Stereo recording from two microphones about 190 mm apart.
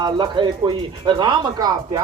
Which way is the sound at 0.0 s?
25° right (ahead or behind).